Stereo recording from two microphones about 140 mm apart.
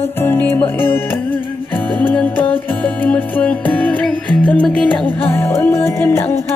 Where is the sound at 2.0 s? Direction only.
10° left (ahead or behind).